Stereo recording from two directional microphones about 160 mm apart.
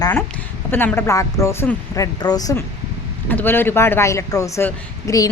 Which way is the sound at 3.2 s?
10° left (ahead or behind).